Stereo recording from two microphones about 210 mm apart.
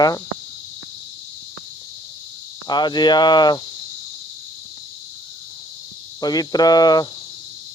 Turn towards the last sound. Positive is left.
turn(degrees=20)  # may be behind; listen again after turning